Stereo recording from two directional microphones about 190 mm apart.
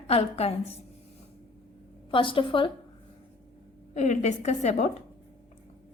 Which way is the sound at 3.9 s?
40° left (ahead or behind).